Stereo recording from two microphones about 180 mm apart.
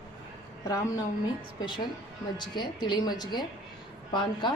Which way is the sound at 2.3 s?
25° left (ahead or behind).